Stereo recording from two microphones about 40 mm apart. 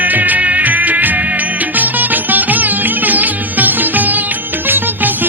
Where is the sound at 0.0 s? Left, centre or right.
Right.